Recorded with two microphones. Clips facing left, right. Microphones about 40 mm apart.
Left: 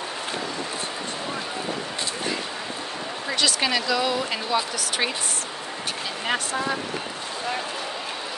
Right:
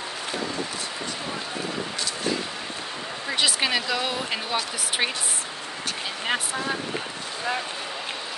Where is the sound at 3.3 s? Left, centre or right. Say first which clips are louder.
Even; centre.